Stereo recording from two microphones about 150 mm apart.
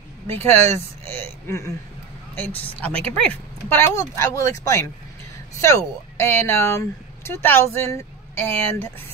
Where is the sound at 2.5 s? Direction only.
40° left (ahead or behind).